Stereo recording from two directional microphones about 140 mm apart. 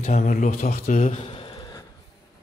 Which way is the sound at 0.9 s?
50° left (ahead or behind).